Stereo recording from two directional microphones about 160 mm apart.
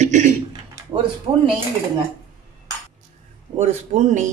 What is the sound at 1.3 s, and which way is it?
Speech, 25° right (ahead or behind).